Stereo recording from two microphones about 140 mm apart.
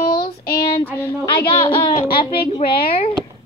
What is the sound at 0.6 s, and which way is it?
Child singing, 40° left (ahead or behind).